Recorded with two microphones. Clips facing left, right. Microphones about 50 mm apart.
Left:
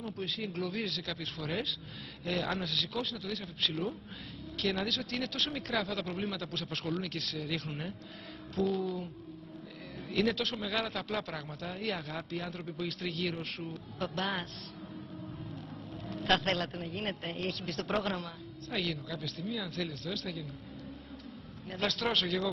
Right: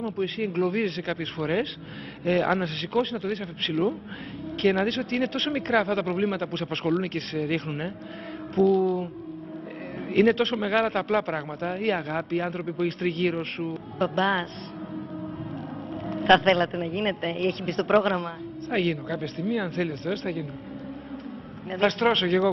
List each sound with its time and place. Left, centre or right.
0.5 s speech: right
2.2 s a woman's voice: right
8.5 s speech: right
10.0 s a woman's voice: right
16.1 s vehicle: right
16.3 s a woman's voice: right
21.6 s speech: right